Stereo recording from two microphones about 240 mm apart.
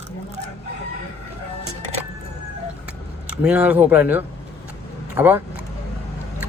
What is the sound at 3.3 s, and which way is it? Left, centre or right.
Speech, centre.